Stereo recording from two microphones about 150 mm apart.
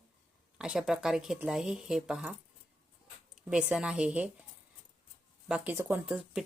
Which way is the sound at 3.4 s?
5° right (ahead or behind).